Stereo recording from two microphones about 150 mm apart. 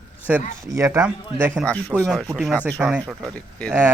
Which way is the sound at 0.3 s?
10° right (ahead or behind).